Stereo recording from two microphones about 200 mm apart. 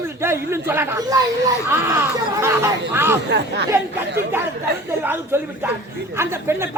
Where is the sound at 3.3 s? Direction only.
55° right (ahead or behind).